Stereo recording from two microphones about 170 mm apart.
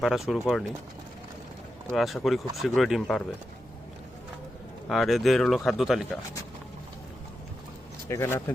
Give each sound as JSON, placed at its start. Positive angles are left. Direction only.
{"t": 0.0, "sound": "speech", "side_deg": 0}
{"t": 1.9, "sound": "speech", "side_deg": 0}
{"t": 4.9, "sound": "speech", "side_deg": 0}
{"t": 8.0, "sound": "speech", "side_deg": 15}